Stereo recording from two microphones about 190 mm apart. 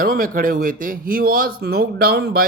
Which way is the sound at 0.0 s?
50° right (ahead or behind).